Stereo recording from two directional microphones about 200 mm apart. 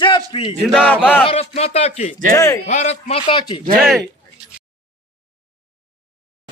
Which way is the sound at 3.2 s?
20° left (ahead or behind).